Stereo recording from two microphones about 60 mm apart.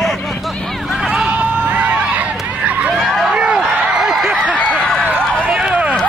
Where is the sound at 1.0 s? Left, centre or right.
Centre.